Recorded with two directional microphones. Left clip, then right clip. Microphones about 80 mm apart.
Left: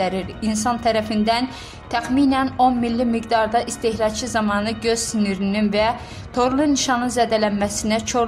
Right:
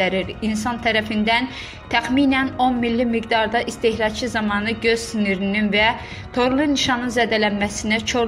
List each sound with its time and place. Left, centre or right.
0.0 s a woman's voice: centre